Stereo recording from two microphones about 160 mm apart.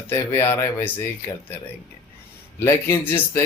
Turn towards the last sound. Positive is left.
turn(degrees=15)  # may be behind; listen again after turning